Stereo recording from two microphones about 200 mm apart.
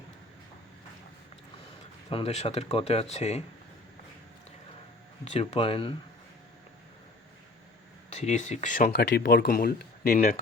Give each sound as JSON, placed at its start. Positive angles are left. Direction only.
{"t": 2.0, "sound": "speech", "side_deg": 30}
{"t": 5.2, "sound": "speech", "side_deg": 30}
{"t": 8.1, "sound": "speech", "side_deg": 35}